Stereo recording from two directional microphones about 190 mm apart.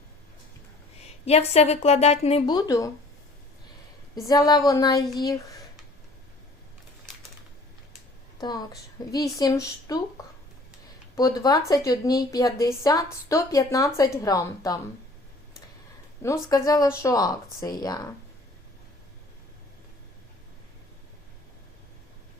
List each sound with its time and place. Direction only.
1.2 s a woman's voice: 35° left (ahead or behind)
2.6 s a woman's voice: 15° left (ahead or behind)
4.1 s speech: 20° left (ahead or behind)
8.4 s speech: 20° left (ahead or behind)
11.1 s a woman's voice: 20° left (ahead or behind)
16.2 s speech: 20° left (ahead or behind)